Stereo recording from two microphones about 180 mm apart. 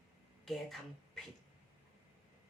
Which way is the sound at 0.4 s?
Centre (ahead or behind).